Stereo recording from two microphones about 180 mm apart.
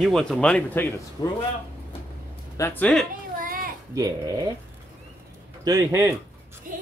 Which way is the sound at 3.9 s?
20° right (ahead or behind).